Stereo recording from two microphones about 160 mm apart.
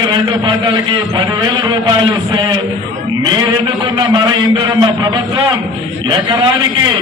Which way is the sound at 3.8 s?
30° right (ahead or behind).